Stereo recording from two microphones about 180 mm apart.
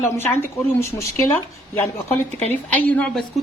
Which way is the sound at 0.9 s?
15° left (ahead or behind).